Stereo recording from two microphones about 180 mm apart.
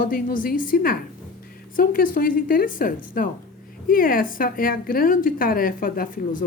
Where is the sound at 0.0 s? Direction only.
50° left (ahead or behind).